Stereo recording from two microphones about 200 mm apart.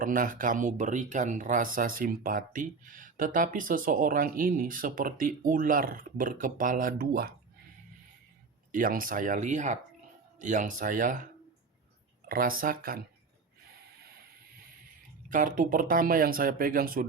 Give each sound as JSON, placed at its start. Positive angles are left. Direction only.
{"t": 0.0, "sound": "speech", "side_deg": -40}
{"t": 8.7, "sound": "speech", "side_deg": -45}
{"t": 12.3, "sound": "speech", "side_deg": -45}
{"t": 15.3, "sound": "speech", "side_deg": -40}